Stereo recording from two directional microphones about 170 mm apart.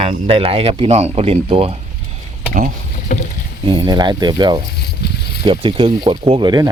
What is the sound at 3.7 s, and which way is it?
Speech, 25° right (ahead or behind).